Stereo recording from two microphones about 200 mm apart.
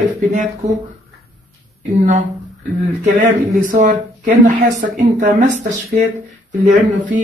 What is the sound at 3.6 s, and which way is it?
Speech, 40° right (ahead or behind).